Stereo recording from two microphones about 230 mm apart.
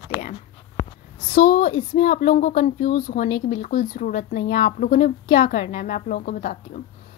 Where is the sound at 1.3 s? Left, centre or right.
Left.